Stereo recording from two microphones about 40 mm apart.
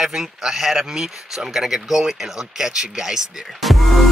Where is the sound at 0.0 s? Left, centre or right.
Centre.